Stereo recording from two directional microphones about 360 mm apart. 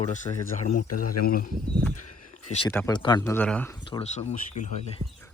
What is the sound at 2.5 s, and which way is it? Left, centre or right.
Speech, centre.